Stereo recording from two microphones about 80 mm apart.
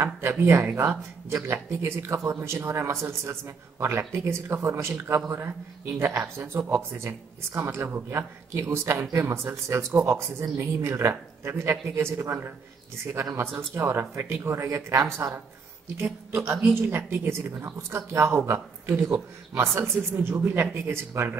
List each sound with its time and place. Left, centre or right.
0.0 s speech: right
16.3 s speech: right